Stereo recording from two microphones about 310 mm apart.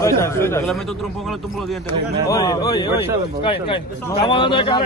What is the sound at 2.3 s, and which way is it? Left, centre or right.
Speech, centre.